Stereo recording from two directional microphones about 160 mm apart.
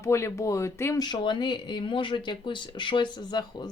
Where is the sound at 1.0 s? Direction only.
30° left (ahead or behind).